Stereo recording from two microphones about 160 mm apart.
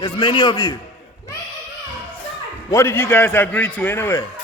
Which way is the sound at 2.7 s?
15° left (ahead or behind).